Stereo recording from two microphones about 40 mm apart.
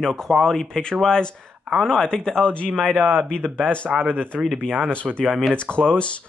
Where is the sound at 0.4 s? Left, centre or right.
Centre.